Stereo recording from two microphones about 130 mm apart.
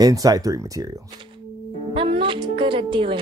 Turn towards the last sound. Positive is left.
turn(degrees=-40)  # may be behind; listen again after turning